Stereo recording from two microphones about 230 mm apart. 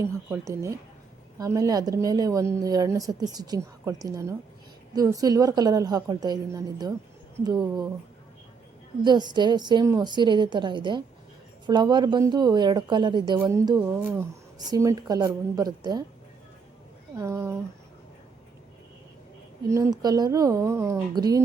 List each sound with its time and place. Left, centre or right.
0.0 s a woman's voice: centre
9.0 s speech: centre
17.2 s a woman's voice: centre
19.6 s a woman's voice: centre